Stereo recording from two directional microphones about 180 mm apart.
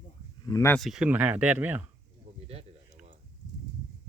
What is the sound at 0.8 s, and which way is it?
Speech, centre (ahead or behind).